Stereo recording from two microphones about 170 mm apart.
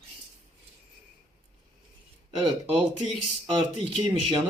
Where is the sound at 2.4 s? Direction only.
30° right (ahead or behind).